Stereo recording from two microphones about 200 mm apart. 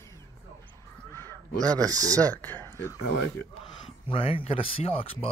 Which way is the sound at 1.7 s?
20° right (ahead or behind).